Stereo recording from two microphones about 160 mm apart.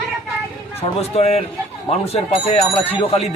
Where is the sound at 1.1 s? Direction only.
40° left (ahead or behind).